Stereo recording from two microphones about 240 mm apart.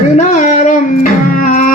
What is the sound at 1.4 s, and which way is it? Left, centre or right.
Music, left.